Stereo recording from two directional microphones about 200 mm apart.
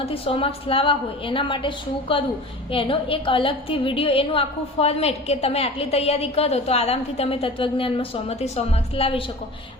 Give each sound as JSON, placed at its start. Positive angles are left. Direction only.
{"t": 0.0, "sound": "a woman's voice", "side_deg": 30}